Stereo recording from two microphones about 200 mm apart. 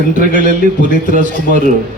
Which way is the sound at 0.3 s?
40° right (ahead or behind).